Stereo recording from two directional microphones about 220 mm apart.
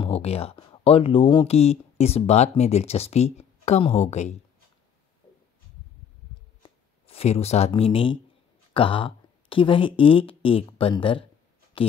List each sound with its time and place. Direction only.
0.0 s speech: 25° left (ahead or behind)
6.6 s speech: 25° left (ahead or behind)